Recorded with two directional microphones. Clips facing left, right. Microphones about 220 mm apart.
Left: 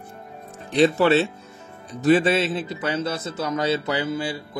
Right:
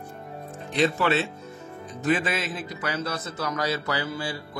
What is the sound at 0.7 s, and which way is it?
A man's voice, 35° left (ahead or behind).